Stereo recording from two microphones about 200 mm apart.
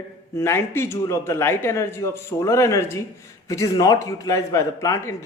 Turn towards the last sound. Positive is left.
turn(degrees=15)  # may be behind; listen again after turning